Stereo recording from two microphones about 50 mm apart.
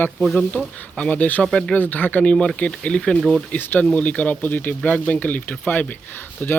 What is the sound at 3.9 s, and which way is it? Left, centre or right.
Speech, left.